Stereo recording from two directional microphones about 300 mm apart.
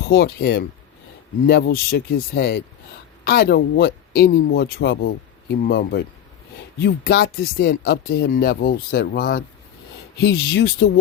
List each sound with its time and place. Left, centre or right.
0.1 s speech: left